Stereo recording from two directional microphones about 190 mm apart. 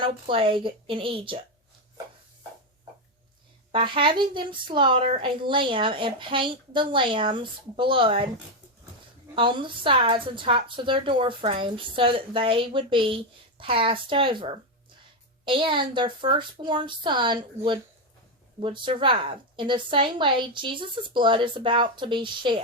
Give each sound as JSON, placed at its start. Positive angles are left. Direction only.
{"t": 0.0, "sound": "a woman's voice", "side_deg": -25}
{"t": 3.7, "sound": "a woman's voice", "side_deg": -25}
{"t": 9.3, "sound": "a woman's voice", "side_deg": -25}